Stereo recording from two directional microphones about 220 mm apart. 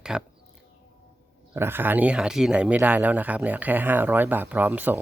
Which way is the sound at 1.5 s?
10° right (ahead or behind).